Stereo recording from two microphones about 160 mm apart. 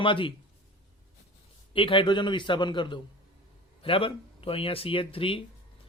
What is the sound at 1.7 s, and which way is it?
A man's voice, 35° left (ahead or behind).